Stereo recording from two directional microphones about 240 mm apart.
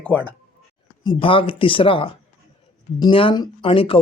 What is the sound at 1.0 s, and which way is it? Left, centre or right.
Speech, centre.